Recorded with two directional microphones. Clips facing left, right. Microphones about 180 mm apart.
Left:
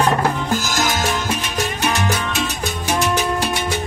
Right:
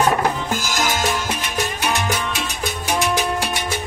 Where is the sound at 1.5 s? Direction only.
10° right (ahead or behind).